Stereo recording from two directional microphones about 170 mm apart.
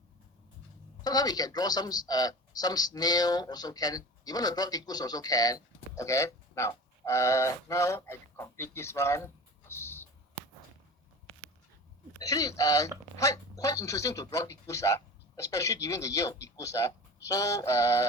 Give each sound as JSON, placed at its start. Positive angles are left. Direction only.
{"t": 1.0, "sound": "speech", "side_deg": 25}
{"t": 12.2, "sound": "speech", "side_deg": 20}